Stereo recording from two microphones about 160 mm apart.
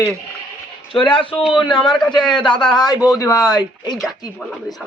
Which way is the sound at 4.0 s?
Centre (ahead or behind).